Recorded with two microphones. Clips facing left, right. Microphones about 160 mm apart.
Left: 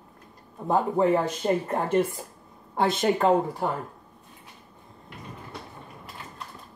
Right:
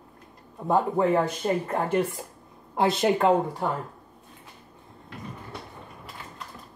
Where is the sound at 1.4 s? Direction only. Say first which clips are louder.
Left 4 dB; 20° left (ahead or behind).